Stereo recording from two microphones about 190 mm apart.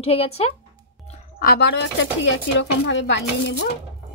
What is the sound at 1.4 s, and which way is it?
Speech, 55° left (ahead or behind).